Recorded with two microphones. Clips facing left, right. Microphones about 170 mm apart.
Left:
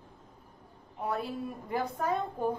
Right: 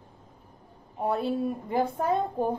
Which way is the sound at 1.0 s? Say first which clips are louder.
Right 7 dB; 30° right (ahead or behind).